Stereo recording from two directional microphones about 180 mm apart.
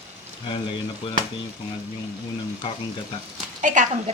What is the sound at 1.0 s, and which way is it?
Speech, 30° left (ahead or behind).